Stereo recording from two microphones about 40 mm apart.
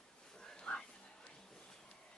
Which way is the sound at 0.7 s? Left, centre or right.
Left.